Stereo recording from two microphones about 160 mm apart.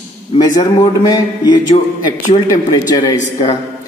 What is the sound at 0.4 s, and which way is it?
A man's voice, 25° left (ahead or behind).